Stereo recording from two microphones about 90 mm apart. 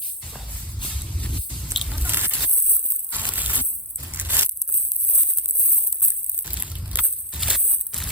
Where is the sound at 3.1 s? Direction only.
20° right (ahead or behind).